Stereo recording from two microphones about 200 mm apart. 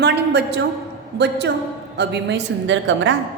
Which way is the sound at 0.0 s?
60° right (ahead or behind).